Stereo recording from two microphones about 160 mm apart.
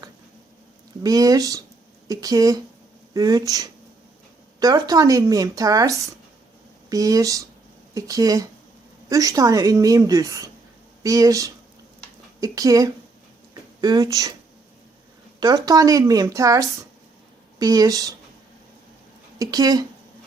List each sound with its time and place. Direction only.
1.0 s a woman's voice: 20° right (ahead or behind)
6.9 s a woman's voice: 20° right (ahead or behind)
15.4 s a woman's voice: 25° right (ahead or behind)
19.4 s a woman's voice: 25° right (ahead or behind)